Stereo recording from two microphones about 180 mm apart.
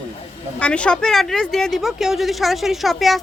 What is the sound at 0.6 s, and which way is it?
Speech, 5° left (ahead or behind).